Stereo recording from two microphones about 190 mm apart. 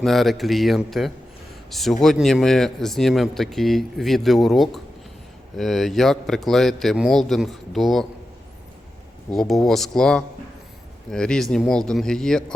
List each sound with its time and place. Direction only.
0.0 s speech: centre (ahead or behind)
9.3 s speech: centre (ahead or behind)